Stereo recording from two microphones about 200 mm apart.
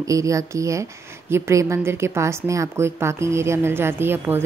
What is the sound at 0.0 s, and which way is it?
A woman's voice, 15° right (ahead or behind).